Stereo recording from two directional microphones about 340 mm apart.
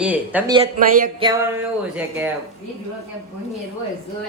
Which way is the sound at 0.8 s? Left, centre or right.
Right.